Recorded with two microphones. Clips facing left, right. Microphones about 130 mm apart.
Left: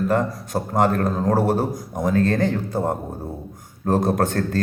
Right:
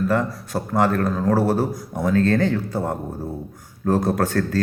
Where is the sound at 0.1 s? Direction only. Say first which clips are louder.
Left 1 dB; 20° left (ahead or behind).